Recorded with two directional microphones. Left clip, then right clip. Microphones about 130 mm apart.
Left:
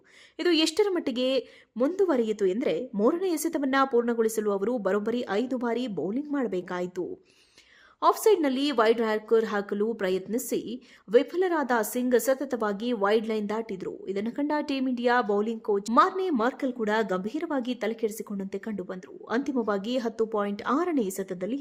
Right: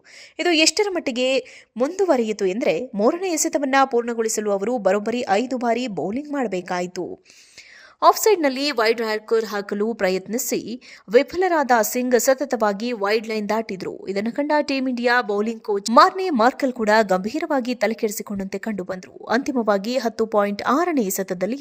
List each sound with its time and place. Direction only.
0.3 s a woman's voice: 15° right (ahead or behind)
8.0 s a woman's voice: 30° right (ahead or behind)